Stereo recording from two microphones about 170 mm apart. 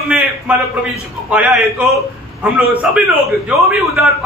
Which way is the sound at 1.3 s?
5° right (ahead or behind).